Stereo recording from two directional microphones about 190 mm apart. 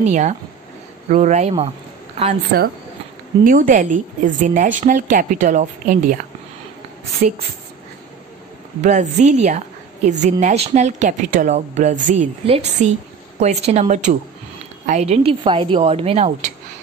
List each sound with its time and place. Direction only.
0.0 s a woman's voice: 40° right (ahead or behind)
2.5 s a woman's voice: 55° right (ahead or behind)
7.2 s a woman's voice: 40° right (ahead or behind)
8.8 s a woman's voice: 35° right (ahead or behind)